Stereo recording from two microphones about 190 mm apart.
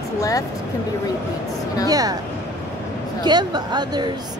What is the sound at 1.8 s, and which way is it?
Speech, 20° right (ahead or behind).